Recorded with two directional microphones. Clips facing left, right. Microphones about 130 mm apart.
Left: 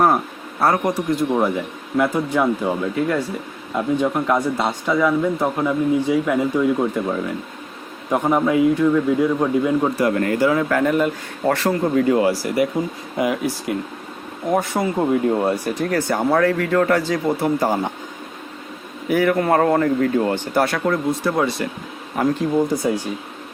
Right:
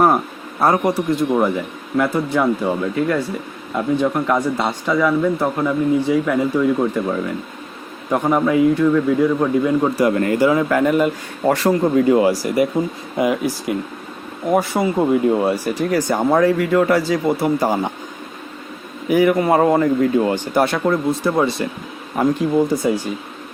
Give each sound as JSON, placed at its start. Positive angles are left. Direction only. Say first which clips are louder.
{"t": 0.6, "sound": "speech", "louder": "right 2 dB", "side_deg": -15}
{"t": 1.4, "sound": "speech", "louder": "right 2 dB", "side_deg": 5}
{"t": 9.9, "sound": "speech", "louder": "right 2 dB", "side_deg": -15}
{"t": 14.5, "sound": "speech", "louder": "right 3 dB", "side_deg": -15}
{"t": 16.0, "sound": "speech", "louder": "right 2 dB", "side_deg": -15}
{"t": 19.0, "sound": "speech", "louder": "right 3 dB", "side_deg": -15}
{"t": 22.5, "sound": "speech", "louder": "right 2 dB", "side_deg": 0}